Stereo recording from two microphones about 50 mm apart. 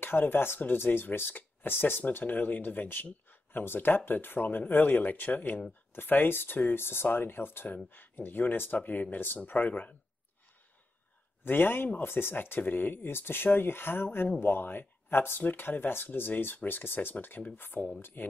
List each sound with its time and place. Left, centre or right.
0.0 s speech: left
11.4 s speech: left